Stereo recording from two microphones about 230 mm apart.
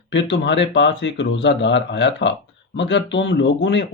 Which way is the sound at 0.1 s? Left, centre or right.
Left.